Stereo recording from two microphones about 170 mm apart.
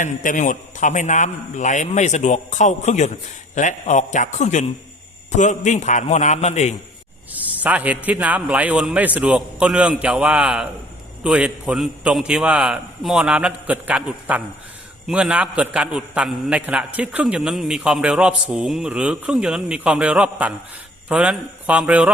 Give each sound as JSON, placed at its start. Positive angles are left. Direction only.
{"t": 0.0, "sound": "a man's voice", "side_deg": 50}
{"t": 7.3, "sound": "a man's voice", "side_deg": -10}